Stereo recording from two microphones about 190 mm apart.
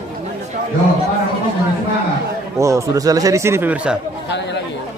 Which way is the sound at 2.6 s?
15° right (ahead or behind).